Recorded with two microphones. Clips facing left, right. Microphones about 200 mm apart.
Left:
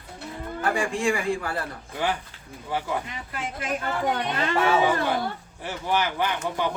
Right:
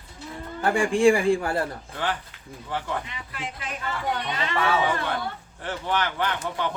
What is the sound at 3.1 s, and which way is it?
Speech, 45° left (ahead or behind).